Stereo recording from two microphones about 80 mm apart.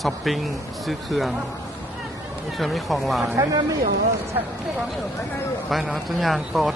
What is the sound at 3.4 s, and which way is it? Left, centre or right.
Speech, right.